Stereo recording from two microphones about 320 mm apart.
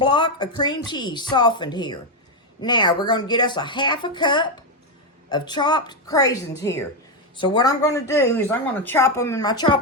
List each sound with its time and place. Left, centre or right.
0.0 s speech: centre